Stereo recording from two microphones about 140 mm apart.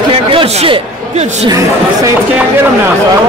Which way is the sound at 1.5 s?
20° right (ahead or behind).